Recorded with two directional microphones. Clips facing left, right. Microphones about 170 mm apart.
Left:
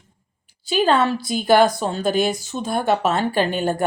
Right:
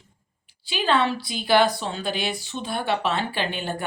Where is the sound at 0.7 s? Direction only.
45° left (ahead or behind).